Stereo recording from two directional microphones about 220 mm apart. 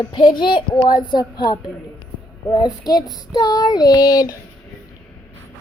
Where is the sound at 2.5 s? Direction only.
20° left (ahead or behind).